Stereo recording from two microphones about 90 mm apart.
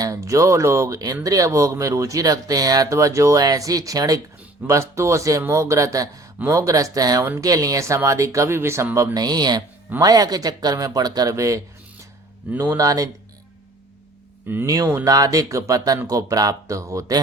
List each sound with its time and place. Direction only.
0.0 s speech: 40° right (ahead or behind)
9.1 s speech: 50° right (ahead or behind)
12.7 s speech: 40° right (ahead or behind)
14.4 s speech: 25° right (ahead or behind)
15.0 s speech: 40° right (ahead or behind)